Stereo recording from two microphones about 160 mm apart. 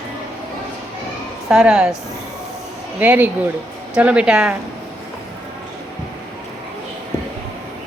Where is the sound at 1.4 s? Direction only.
5° right (ahead or behind).